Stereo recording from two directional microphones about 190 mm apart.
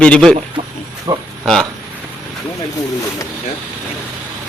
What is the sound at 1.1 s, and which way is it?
Speech, 20° right (ahead or behind).